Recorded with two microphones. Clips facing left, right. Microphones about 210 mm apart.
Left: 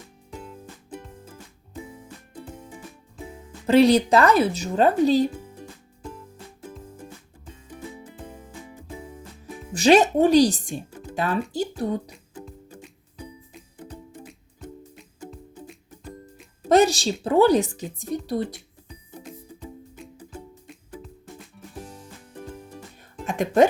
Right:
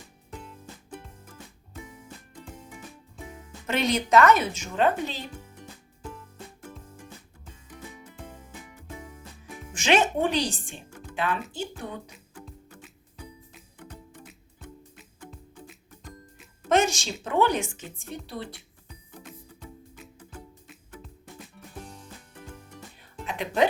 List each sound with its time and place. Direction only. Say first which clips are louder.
1.2 s music: left 3 dB; 30° left (ahead or behind)
3.2 s speech: left 10 dB; 30° left (ahead or behind)
7.7 s music: left 6 dB; 30° left (ahead or behind)
9.6 s speech: left 7 dB; 35° left (ahead or behind)
13.8 s music: left 5 dB; 25° left (ahead or behind)
15.3 s music: left 5 dB; 5° left (ahead or behind)
16.6 s a sound: left 6 dB; 35° left (ahead or behind)
17.2 s speech: left 7 dB; 35° left (ahead or behind)
23.2 s music: left 7 dB; 45° left (ahead or behind)